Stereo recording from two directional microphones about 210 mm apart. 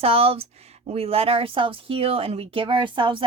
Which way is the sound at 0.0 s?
25° right (ahead or behind).